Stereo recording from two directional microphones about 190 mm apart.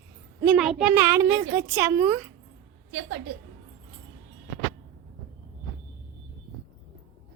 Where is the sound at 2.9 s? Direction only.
75° right (ahead or behind).